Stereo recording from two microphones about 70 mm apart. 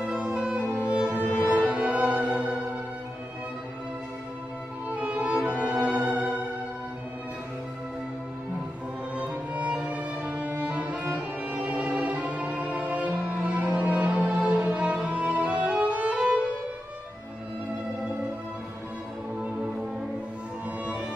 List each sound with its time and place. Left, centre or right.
0.0 s music: centre
4.8 s violin: centre
5.6 s music: centre
9.1 s music: centre